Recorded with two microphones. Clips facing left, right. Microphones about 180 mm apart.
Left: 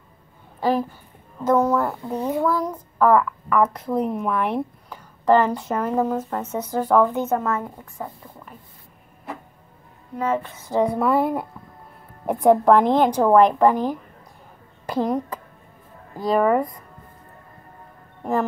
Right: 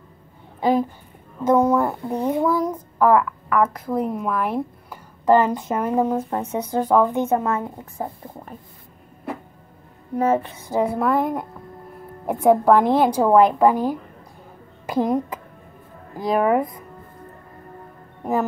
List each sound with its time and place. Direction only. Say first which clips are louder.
1.5 s speech: right 2 dB; 10° right (ahead or behind)
7.8 s speech: right 4 dB; 40° right (ahead or behind)
10.1 s speech: right 4 dB; 40° right (ahead or behind)
10.4 s speech: left 1 dB; 10° right (ahead or behind)
16.2 s speech: even; 10° right (ahead or behind)